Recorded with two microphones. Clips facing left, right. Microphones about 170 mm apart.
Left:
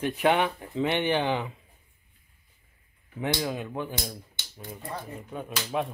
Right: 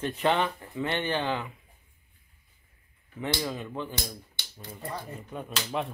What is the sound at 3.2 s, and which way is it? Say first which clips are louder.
Speech: left 2 dB; 15° left (ahead or behind).